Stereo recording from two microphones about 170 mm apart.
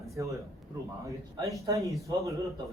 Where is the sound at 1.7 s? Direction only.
20° right (ahead or behind).